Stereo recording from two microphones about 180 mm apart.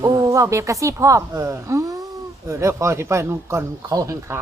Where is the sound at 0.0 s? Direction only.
20° right (ahead or behind).